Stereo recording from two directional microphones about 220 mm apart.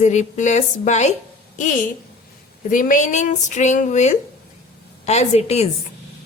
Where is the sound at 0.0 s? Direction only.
35° left (ahead or behind).